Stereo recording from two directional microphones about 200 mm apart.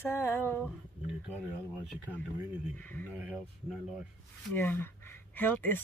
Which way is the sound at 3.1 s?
5° right (ahead or behind).